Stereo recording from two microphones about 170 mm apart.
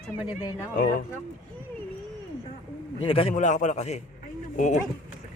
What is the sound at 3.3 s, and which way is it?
A man's voice, 45° left (ahead or behind).